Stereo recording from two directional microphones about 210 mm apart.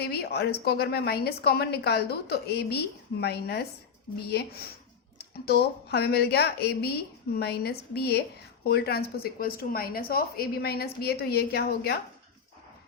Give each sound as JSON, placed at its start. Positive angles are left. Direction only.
{"t": 0.0, "sound": "a woman's voice", "side_deg": 50}